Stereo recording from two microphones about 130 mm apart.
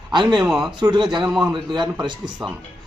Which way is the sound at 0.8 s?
35° right (ahead or behind).